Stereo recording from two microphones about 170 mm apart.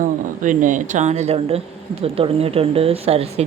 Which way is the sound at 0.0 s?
50° right (ahead or behind).